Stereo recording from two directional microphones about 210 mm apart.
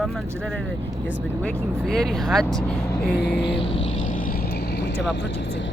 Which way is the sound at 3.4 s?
25° left (ahead or behind).